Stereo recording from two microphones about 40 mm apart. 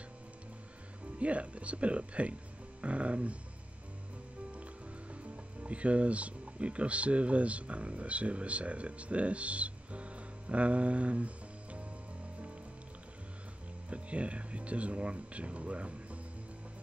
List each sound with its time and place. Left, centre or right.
1.2 s speech: right
5.1 s speech: right
13.8 s speech: right